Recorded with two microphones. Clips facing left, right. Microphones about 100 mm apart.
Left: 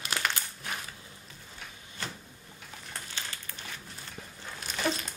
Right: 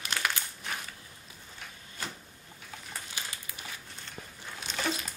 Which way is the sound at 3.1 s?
10° right (ahead or behind).